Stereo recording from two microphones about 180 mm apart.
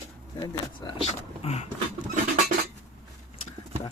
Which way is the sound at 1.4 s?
35° left (ahead or behind).